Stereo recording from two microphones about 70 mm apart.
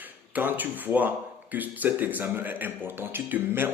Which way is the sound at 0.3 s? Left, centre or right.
Right.